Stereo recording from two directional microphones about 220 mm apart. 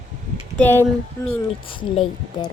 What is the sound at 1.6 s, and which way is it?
Speech, 25° left (ahead or behind).